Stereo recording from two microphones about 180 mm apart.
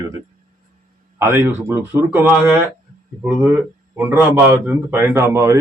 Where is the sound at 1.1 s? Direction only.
15° right (ahead or behind).